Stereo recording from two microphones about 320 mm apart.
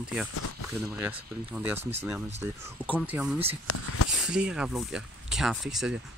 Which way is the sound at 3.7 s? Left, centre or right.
Left.